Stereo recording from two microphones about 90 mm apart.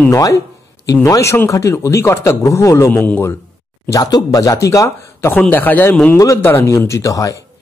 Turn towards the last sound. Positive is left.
turn(degrees=40)  # may be behind; listen again after turning